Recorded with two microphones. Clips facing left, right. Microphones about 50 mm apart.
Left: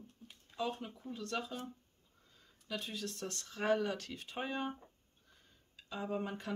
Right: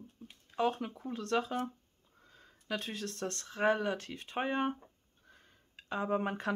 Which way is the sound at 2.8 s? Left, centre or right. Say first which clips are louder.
Right 4 dB; right.